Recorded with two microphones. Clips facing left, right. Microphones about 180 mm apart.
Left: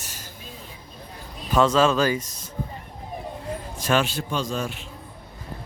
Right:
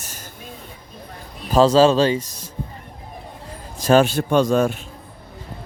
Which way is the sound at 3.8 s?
40° right (ahead or behind).